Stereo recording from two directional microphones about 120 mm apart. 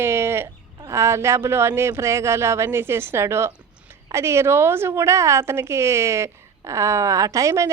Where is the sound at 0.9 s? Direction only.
25° right (ahead or behind).